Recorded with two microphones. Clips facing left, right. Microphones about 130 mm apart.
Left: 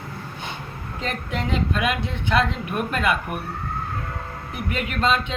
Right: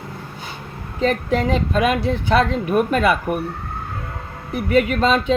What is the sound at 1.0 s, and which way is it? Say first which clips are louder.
Speech: right 10 dB; 40° right (ahead or behind).